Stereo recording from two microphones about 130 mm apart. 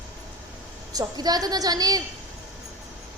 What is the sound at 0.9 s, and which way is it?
A woman's voice, 30° right (ahead or behind).